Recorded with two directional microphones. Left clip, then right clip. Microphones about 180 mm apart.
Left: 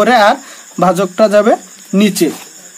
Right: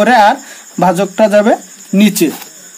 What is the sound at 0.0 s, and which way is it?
Speech, 10° right (ahead or behind).